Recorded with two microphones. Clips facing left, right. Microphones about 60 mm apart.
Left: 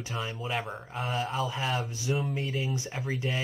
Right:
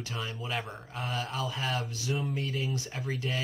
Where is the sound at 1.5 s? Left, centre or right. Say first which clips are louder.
Left 2 dB; centre.